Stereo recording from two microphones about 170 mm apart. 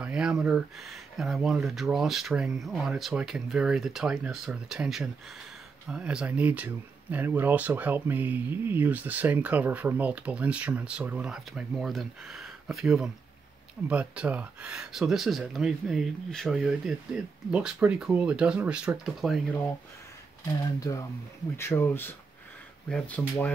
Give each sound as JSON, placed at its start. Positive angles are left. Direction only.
{"t": 0.0, "sound": "speech", "side_deg": -5}
{"t": 20.4, "sound": "speech", "side_deg": 20}